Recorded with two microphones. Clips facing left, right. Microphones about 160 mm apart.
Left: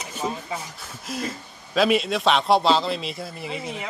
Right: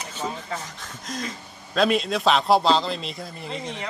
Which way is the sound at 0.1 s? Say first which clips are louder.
Left 2 dB; 10° left (ahead or behind).